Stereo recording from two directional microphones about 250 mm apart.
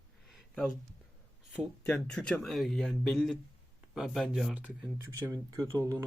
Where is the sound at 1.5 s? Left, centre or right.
Centre.